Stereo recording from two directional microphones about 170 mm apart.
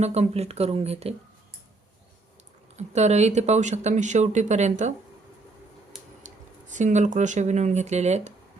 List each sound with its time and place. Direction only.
0.0 s speech: 40° right (ahead or behind)
2.7 s speech: 40° right (ahead or behind)
6.2 s speech: 45° right (ahead or behind)